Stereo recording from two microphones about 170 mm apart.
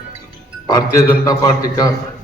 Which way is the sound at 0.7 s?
20° left (ahead or behind).